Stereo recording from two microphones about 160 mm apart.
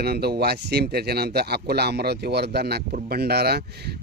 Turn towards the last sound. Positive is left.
turn(degrees=-85)